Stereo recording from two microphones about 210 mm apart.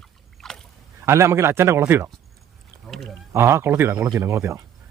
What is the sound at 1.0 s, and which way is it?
Speech, 10° right (ahead or behind).